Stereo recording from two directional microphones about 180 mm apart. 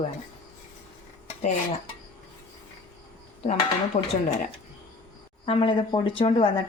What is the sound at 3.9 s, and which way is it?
Speech, 40° left (ahead or behind).